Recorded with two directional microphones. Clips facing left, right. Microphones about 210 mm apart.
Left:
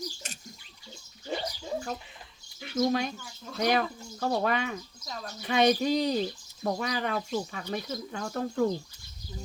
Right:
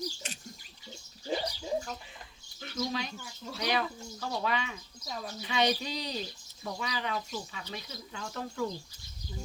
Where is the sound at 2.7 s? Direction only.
50° left (ahead or behind).